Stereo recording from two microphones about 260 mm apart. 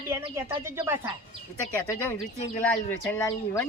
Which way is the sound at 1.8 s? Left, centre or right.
Centre.